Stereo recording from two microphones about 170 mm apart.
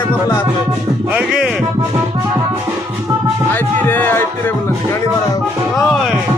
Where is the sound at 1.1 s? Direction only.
5° right (ahead or behind).